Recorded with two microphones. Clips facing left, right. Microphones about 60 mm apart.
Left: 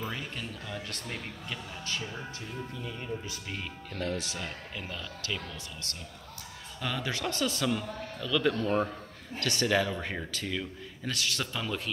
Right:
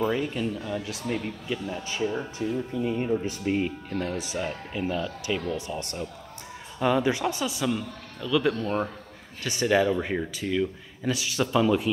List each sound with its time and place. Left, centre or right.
0.0 s speech: centre
1.7 s speech: centre
2.8 s speech: right
3.3 s speech: right